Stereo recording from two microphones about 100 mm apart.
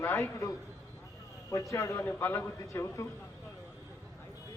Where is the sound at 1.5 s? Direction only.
30° left (ahead or behind).